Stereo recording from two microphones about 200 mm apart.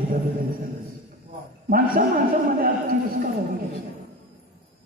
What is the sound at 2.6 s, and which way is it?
Speech, 45° right (ahead or behind).